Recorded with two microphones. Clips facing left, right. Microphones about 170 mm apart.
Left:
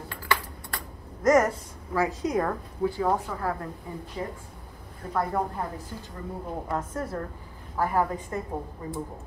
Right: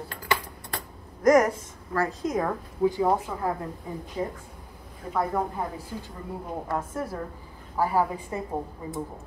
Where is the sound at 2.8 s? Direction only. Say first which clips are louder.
Right 3 dB; 15° right (ahead or behind).